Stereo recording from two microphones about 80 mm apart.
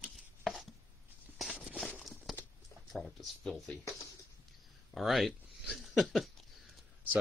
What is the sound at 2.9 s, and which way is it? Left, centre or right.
Speech, centre.